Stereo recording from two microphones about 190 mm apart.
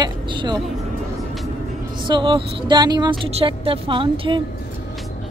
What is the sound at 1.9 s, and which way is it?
Speech, 25° right (ahead or behind).